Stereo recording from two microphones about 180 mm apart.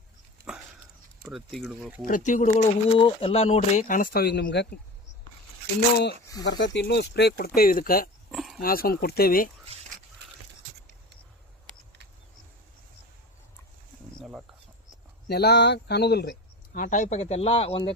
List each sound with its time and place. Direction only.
1.2 s speech: centre (ahead or behind)
2.0 s speech: 45° left (ahead or behind)
3.0 s speech: 30° left (ahead or behind); by 4.7 s 70° left (ahead or behind)
6.4 s speech: 80° left; by 8.1 s 55° left (ahead or behind)
8.3 s a sound: centre (ahead or behind)
8.6 s speech: 55° left (ahead or behind)
14.2 s a sound: 5° right (ahead or behind)
15.3 s speech: 65° left (ahead or behind); by 17.9 s 30° left (ahead or behind)